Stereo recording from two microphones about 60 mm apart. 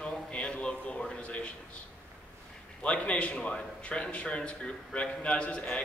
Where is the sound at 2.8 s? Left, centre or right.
Left.